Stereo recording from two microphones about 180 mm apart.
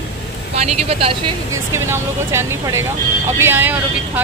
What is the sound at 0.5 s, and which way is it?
Speech, 35° right (ahead or behind).